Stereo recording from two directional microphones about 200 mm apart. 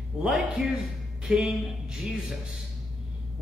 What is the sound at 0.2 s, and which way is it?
A man's voice, 5° right (ahead or behind).